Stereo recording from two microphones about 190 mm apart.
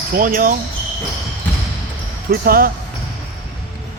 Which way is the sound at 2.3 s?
50° right (ahead or behind).